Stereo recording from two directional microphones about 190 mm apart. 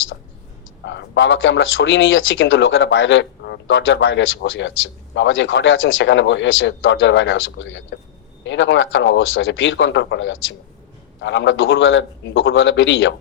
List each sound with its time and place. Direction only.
0.9 s speech: 70° left (ahead or behind)